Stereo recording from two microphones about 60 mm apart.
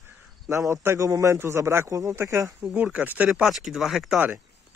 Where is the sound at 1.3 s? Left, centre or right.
Right.